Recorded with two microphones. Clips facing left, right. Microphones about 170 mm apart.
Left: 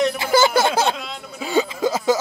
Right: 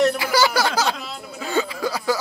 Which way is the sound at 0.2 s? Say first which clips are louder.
Left 3 dB; 25° left (ahead or behind).